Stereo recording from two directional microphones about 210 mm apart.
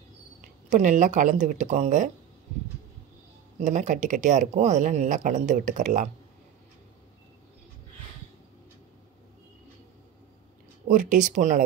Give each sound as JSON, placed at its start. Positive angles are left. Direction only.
{"t": 0.4, "sound": "speech", "side_deg": -35}
{"t": 3.5, "sound": "speech", "side_deg": -35}
{"t": 10.9, "sound": "speech", "side_deg": -40}